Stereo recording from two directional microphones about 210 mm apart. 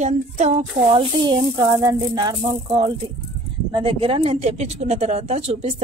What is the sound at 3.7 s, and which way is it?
Speech, 25° right (ahead or behind).